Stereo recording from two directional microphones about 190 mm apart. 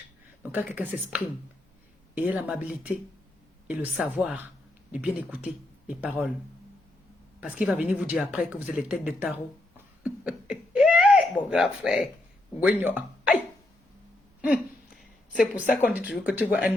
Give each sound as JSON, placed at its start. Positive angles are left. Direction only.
{"t": 0.5, "sound": "speech", "side_deg": -5}
{"t": 7.4, "sound": "speech", "side_deg": -5}
{"t": 9.7, "sound": "a sound", "side_deg": -5}
{"t": 12.6, "sound": "speech", "side_deg": -10}
{"t": 14.4, "sound": "a woman's voice", "side_deg": -5}